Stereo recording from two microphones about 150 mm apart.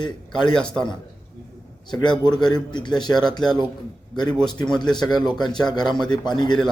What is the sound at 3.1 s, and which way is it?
Speech, 5° left (ahead or behind).